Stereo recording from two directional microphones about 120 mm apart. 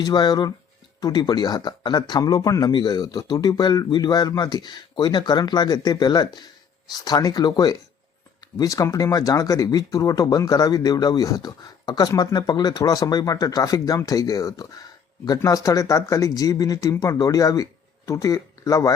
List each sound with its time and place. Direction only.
0.0 s speech: 35° left (ahead or behind)